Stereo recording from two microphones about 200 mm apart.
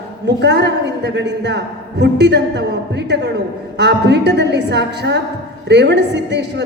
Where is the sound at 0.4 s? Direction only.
60° right (ahead or behind).